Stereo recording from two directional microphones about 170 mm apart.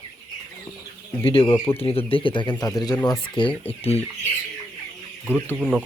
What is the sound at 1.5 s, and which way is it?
Speech, 30° left (ahead or behind).